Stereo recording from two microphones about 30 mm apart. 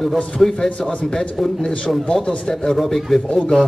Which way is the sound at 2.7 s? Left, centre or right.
Centre.